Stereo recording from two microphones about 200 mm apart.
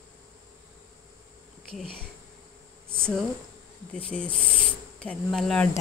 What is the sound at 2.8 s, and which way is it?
Speech, 5° left (ahead or behind).